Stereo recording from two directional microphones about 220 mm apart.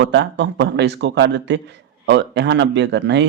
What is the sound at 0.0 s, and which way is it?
A man's voice, 50° right (ahead or behind).